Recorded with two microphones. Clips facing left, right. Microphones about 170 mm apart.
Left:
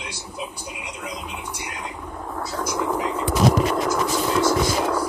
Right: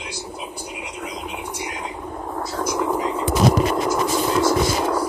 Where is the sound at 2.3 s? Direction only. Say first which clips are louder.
Right 2 dB; 15° right (ahead or behind).